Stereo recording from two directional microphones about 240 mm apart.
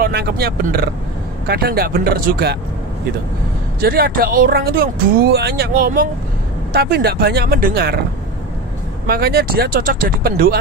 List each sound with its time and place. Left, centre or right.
0.0 s speech: right
3.8 s speech: right
9.0 s speech: right